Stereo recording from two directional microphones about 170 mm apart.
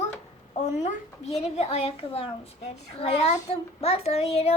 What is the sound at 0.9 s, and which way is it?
A child's voice, 40° left (ahead or behind).